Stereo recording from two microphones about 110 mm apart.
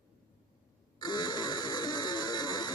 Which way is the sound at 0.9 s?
40° left (ahead or behind).